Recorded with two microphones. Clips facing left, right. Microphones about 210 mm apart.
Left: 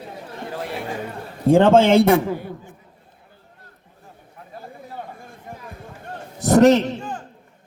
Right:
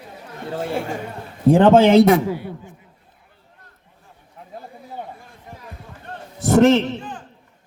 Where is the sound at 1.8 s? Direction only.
50° left (ahead or behind).